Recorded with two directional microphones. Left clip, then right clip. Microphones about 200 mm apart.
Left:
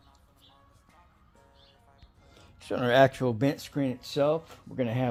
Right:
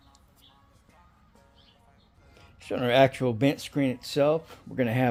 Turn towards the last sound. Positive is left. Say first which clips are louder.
# right 4 dB
turn(degrees=-25)  # may be behind; listen again after turning